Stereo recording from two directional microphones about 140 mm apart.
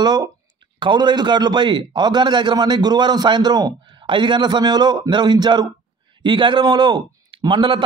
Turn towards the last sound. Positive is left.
turn(degrees=-35)  # may be behind; listen again after turning